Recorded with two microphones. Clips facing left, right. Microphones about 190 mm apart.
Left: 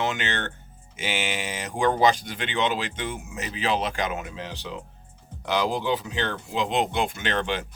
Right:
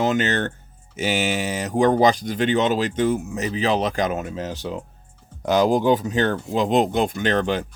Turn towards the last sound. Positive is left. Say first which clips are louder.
# right 6 dB
turn(degrees=-40)  # may be behind; listen again after turning